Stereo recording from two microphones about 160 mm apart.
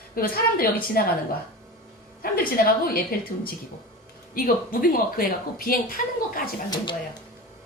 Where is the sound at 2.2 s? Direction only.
65° left (ahead or behind).